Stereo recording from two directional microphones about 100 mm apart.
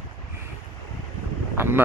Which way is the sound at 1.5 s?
25° right (ahead or behind).